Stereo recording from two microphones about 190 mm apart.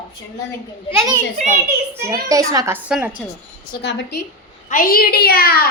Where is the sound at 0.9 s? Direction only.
15° right (ahead or behind).